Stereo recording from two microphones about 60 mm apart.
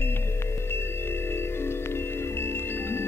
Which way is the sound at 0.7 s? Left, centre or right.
Left.